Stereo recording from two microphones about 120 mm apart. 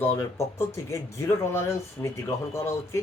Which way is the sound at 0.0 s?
20° left (ahead or behind).